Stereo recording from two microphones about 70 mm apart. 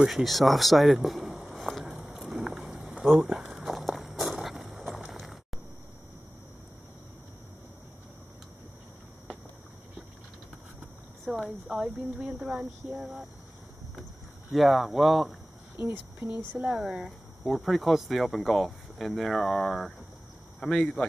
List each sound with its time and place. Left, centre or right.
0.0 s speech: centre
1.9 s a sound: right
2.1 s a sound: centre
3.8 s walk: centre
5.1 s a sound: centre
11.6 s speech: centre
12.5 s speech: right
14.5 s speech: centre
15.7 s speech: right
16.5 s speech: centre
17.6 s speech: centre
20.6 s speech: centre